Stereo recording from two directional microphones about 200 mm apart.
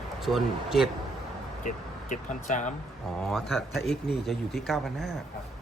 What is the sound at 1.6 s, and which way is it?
Speech, 40° left (ahead or behind).